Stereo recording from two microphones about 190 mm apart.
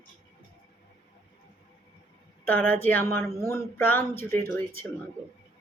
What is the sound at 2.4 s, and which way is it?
Speech, 10° left (ahead or behind).